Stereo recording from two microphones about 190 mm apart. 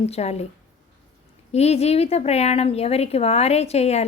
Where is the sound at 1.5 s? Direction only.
35° left (ahead or behind).